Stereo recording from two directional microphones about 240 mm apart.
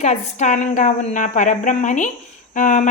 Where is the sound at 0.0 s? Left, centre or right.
Left.